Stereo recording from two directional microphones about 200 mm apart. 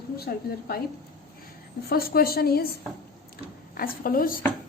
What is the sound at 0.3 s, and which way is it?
Speech, 50° left (ahead or behind).